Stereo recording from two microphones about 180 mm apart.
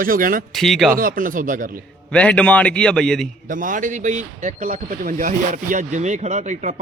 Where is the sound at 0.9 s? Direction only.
50° right (ahead or behind).